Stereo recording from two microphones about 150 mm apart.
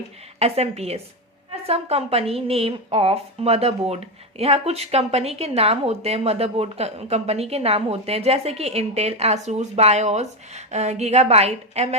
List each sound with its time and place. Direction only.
0.3 s a woman's voice: 45° right (ahead or behind)